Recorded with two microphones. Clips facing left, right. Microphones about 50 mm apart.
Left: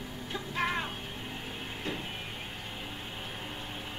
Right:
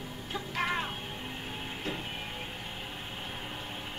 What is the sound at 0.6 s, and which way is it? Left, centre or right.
Music, centre.